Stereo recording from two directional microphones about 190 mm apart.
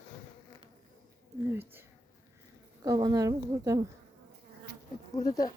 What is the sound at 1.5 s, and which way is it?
A woman's voice, 10° right (ahead or behind).